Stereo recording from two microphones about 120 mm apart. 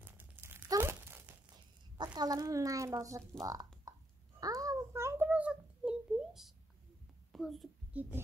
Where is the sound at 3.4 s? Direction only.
30° right (ahead or behind).